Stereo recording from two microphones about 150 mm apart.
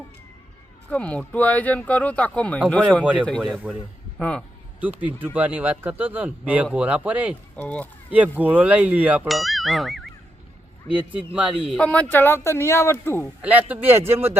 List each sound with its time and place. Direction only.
0.9 s speech: 10° left (ahead or behind)
3.0 s speech: 10° right (ahead or behind)
3.2 s speech: 5° left (ahead or behind)
4.8 s speech: 10° right (ahead or behind)
7.5 s speech: 10° left (ahead or behind)
8.1 s speech: 10° right (ahead or behind)
9.2 s speech: centre (ahead or behind)
11.8 s speech: 10° left (ahead or behind)
13.4 s speech: 10° right (ahead or behind)